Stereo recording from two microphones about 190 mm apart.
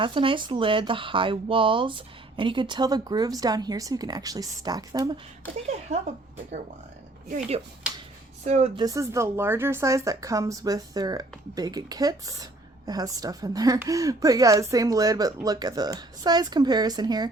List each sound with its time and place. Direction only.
0.0 s a woman's voice: 25° right (ahead or behind)
5.9 s speech: 40° right (ahead or behind)
8.8 s a woman's voice: 15° right (ahead or behind)